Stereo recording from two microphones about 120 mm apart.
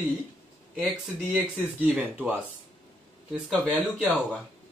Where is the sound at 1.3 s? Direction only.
15° right (ahead or behind).